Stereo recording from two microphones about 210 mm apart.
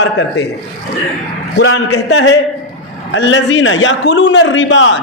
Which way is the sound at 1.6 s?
70° left (ahead or behind).